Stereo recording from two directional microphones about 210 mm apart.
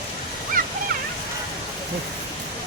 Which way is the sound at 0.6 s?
40° right (ahead or behind).